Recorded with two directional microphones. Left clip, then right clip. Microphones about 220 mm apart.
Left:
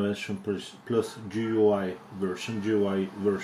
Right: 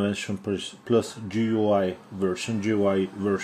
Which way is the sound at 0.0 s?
55° right (ahead or behind).